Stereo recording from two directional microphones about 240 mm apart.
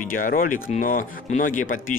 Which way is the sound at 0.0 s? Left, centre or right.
Left.